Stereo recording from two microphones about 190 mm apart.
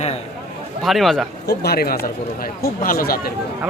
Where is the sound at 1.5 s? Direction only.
55° left (ahead or behind).